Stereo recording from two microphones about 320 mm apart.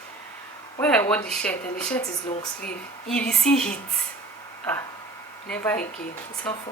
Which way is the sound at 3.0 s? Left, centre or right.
Centre.